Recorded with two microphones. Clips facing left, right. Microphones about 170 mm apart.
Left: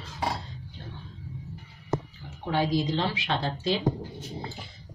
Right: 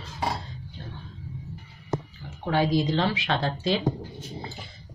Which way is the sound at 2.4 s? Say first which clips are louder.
Right 3 dB; 70° right (ahead or behind).